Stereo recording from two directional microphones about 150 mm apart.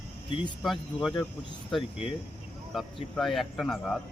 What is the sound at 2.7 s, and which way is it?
Speech, centre (ahead or behind).